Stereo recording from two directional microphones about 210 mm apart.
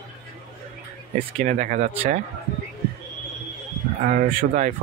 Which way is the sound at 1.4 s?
35° right (ahead or behind).